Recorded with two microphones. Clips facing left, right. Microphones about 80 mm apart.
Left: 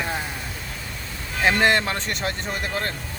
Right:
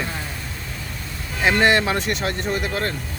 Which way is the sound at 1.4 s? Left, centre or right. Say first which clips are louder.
Right 2 dB; centre.